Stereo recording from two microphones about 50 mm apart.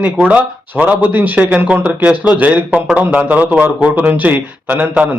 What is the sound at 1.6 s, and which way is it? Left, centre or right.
Speech, right.